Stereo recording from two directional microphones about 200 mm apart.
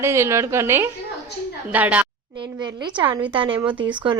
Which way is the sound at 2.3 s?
25° right (ahead or behind).